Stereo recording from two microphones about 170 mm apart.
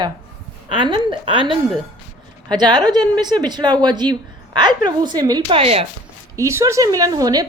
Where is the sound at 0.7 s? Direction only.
30° right (ahead or behind).